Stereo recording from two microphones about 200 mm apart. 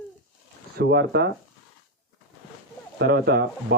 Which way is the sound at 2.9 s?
55° right (ahead or behind).